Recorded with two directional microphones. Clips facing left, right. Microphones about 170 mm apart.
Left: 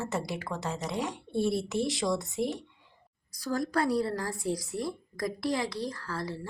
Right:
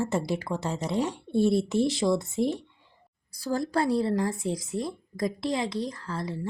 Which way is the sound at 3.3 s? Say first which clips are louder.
Right 2 dB; 30° right (ahead or behind).